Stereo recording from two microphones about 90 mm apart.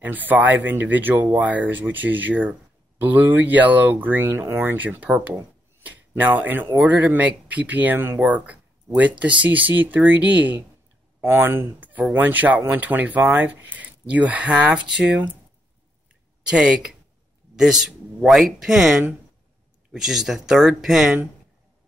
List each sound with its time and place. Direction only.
0.0 s speech: 20° right (ahead or behind)
16.4 s speech: 10° right (ahead or behind)